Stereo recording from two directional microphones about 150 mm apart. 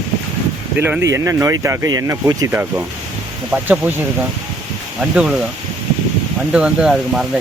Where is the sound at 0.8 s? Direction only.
15° right (ahead or behind).